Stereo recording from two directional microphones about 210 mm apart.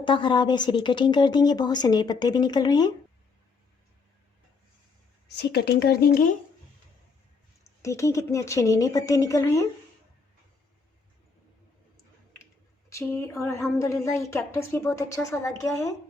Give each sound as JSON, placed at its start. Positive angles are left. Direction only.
{"t": 0.0, "sound": "speech", "side_deg": 20}
{"t": 5.4, "sound": "speech", "side_deg": 50}
{"t": 7.8, "sound": "speech", "side_deg": 15}
{"t": 12.9, "sound": "speech", "side_deg": 15}